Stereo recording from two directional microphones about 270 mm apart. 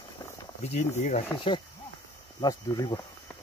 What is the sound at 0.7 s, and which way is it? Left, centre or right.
Speech, left.